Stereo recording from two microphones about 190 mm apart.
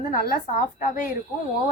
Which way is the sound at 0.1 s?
50° left (ahead or behind).